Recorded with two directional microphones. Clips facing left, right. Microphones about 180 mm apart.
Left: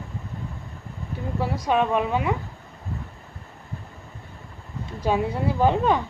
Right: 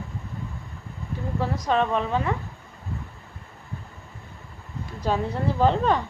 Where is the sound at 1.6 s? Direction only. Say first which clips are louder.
Left 2 dB; 10° left (ahead or behind).